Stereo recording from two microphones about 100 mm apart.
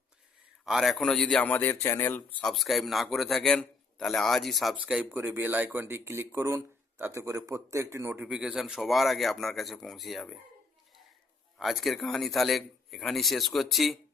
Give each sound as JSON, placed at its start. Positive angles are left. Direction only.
{"t": 0.6, "sound": "a man's voice", "side_deg": -5}
{"t": 1.5, "sound": "speech", "side_deg": 20}
{"t": 2.4, "sound": "a man's voice", "side_deg": 0}
{"t": 4.8, "sound": "speech", "side_deg": -10}
{"t": 8.2, "sound": "a man's voice", "side_deg": -10}
{"t": 11.5, "sound": "a man's voice", "side_deg": 0}